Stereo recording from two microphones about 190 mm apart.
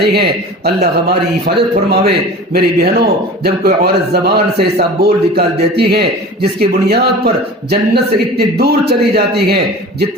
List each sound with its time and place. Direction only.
0.0 s a man's voice: 55° right (ahead or behind)